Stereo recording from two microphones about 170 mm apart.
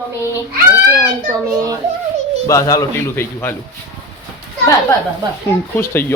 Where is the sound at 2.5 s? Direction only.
20° left (ahead or behind).